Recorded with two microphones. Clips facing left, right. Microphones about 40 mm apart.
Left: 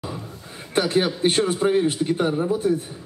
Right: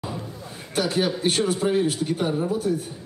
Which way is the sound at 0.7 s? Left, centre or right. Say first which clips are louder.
Left 3 dB; left.